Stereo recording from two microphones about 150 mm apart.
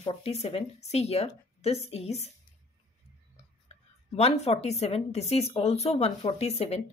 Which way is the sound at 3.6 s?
45° left (ahead or behind).